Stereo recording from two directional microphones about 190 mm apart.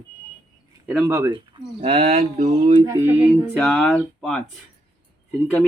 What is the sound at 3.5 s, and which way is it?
Speech, centre (ahead or behind).